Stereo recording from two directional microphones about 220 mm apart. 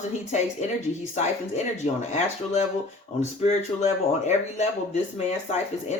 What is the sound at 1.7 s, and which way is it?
Speech, 30° left (ahead or behind).